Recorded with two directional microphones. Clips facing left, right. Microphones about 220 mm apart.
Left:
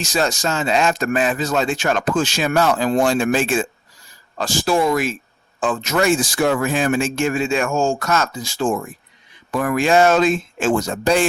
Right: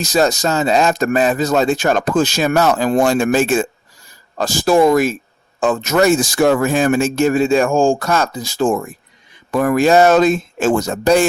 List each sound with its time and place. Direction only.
0.0 s speech: 40° right (ahead or behind)